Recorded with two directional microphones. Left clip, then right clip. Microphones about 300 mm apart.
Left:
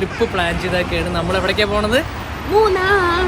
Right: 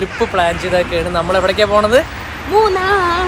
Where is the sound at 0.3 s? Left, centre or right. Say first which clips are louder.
Right 8 dB; centre.